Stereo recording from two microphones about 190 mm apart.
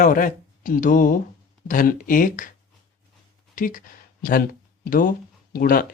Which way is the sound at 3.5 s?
45° left (ahead or behind).